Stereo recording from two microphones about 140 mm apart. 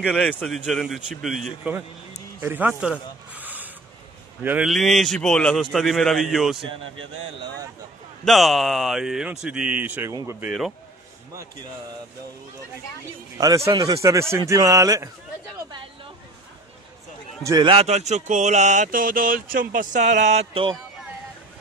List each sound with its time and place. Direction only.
0.0 s a man's voice: 5° left (ahead or behind)
2.4 s a man's voice: 15° right (ahead or behind)
2.8 s a sound: 10° right (ahead or behind)
4.4 s a man's voice: 15° right (ahead or behind)
4.6 s a man's voice: centre (ahead or behind)
8.3 s a man's voice: centre (ahead or behind); by 10.5 s 20° right (ahead or behind)
13.4 s a man's voice: 25° right (ahead or behind)
17.5 s a man's voice: 35° right (ahead or behind)
17.8 s speech: 55° right (ahead or behind)